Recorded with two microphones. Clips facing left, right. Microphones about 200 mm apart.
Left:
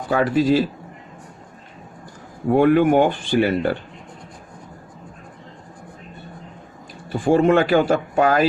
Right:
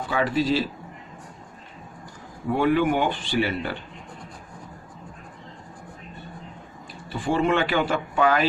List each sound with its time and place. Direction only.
0.1 s speech: 45° left (ahead or behind)
2.5 s speech: 50° left (ahead or behind)
7.1 s speech: 45° left (ahead or behind)